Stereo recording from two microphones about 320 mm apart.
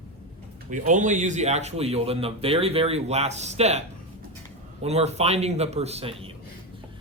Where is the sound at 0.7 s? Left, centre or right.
Right.